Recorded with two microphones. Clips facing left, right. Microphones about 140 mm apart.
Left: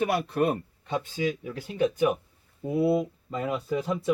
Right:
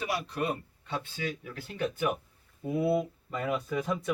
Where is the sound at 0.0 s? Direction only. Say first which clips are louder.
Left 7 dB; 55° left (ahead or behind).